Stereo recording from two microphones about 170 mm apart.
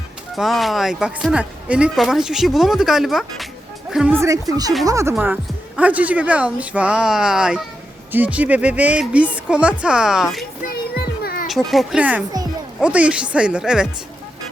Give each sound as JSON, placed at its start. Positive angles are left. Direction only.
{"t": 0.3, "sound": "speech", "side_deg": 0}
{"t": 10.9, "sound": "music", "side_deg": 65}
{"t": 11.4, "sound": "speech", "side_deg": 0}